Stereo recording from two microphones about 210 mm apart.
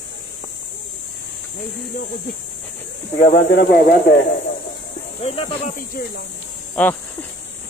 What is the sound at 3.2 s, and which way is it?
Speech, 50° left (ahead or behind).